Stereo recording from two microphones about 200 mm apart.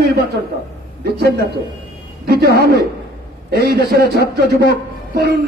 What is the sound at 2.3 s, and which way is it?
A man's voice, 50° right (ahead or behind).